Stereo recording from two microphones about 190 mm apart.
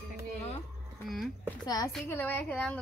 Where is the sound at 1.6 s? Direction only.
20° left (ahead or behind).